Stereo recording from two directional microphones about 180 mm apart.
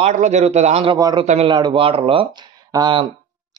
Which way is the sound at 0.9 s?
20° right (ahead or behind).